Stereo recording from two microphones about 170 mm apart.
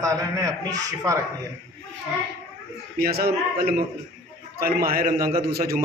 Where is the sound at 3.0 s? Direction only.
65° right (ahead or behind).